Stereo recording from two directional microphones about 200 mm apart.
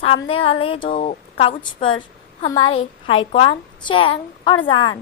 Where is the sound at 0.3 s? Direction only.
25° left (ahead or behind).